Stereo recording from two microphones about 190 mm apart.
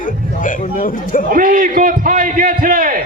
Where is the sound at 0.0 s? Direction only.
45° left (ahead or behind).